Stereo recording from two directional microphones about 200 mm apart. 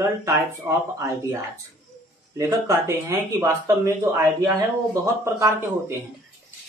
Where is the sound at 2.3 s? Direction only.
15° right (ahead or behind).